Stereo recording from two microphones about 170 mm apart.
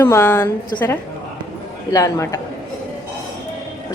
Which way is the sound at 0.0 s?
15° left (ahead or behind).